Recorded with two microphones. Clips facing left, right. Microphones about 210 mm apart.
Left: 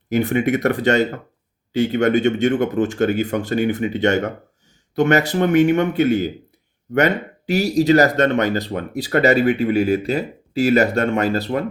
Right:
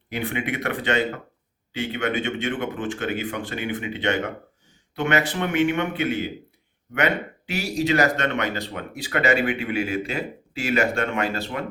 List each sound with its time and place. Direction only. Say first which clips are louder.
0.1 s speech: left 9 dB; 40° left (ahead or behind)